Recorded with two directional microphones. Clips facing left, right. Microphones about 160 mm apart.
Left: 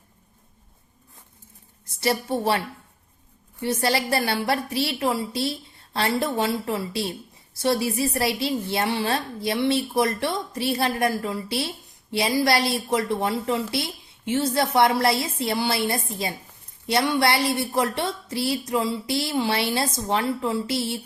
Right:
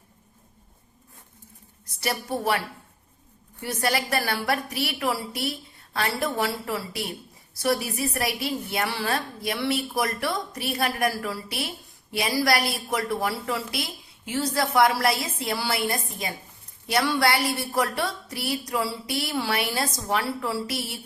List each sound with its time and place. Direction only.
2.0 s a woman's voice: 25° left (ahead or behind)
3.6 s a woman's voice: 25° left (ahead or behind)